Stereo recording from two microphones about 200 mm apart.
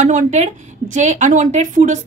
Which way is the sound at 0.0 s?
40° right (ahead or behind).